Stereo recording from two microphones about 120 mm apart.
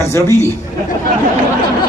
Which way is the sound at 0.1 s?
25° left (ahead or behind).